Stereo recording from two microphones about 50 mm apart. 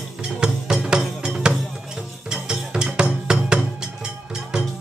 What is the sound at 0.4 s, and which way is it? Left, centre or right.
Music, centre.